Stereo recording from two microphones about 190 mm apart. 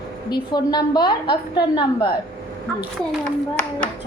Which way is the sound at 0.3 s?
20° left (ahead or behind).